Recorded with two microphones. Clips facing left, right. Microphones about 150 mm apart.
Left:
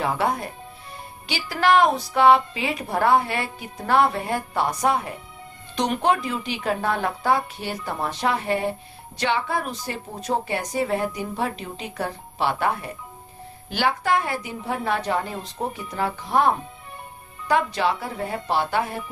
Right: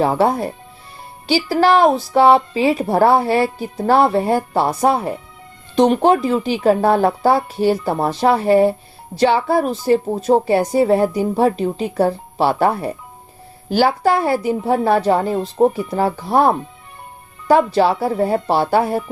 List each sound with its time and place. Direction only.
0.0 s speech: 35° right (ahead or behind)